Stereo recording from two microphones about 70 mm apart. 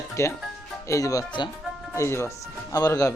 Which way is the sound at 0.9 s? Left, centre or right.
Left.